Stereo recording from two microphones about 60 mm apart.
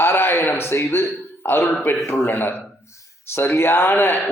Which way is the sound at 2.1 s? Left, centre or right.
Left.